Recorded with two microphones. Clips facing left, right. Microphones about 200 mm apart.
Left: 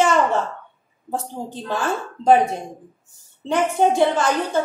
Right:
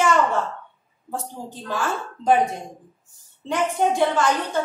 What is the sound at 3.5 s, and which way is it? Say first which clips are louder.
Speech: left 3 dB; 35° left (ahead or behind).